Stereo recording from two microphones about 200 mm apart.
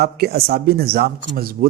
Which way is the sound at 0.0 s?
50° right (ahead or behind).